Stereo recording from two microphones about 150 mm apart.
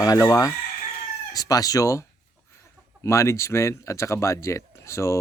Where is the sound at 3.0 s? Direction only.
20° left (ahead or behind).